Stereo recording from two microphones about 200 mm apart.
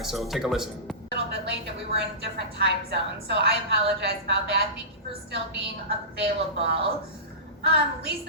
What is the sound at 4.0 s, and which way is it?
Speech, 60° right (ahead or behind).